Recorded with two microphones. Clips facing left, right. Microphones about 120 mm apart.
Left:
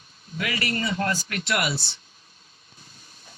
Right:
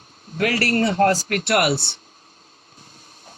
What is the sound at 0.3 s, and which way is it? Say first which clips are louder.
Speech: right 8 dB; 60° right (ahead or behind).